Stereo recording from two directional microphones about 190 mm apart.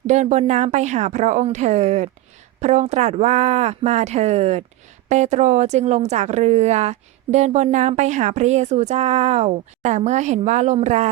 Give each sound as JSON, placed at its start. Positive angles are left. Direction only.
{"t": 0.1, "sound": "a woman's voice", "side_deg": -35}